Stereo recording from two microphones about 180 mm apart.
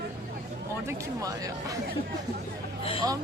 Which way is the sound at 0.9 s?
20° right (ahead or behind).